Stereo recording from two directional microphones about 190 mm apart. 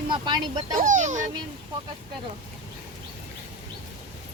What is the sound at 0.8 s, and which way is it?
Speech, 40° right (ahead or behind).